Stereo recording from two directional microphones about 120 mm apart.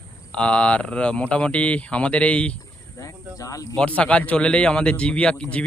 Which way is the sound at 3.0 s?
25° left (ahead or behind).